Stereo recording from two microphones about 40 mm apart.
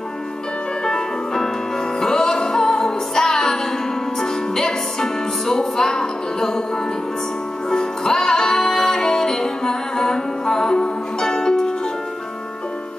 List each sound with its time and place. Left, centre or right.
0.8 s music: centre
7.7 s music: centre